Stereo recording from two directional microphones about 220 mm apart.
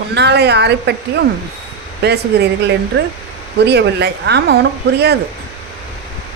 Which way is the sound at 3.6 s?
50° right (ahead or behind).